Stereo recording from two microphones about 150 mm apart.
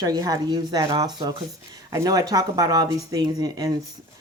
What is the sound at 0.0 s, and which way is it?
Speech, 25° right (ahead or behind).